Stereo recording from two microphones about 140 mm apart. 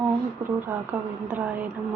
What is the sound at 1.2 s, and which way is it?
Speech, 10° right (ahead or behind).